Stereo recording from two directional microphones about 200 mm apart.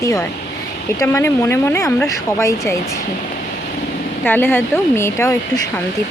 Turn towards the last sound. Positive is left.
turn(degrees=15)  # may be behind; listen again after turning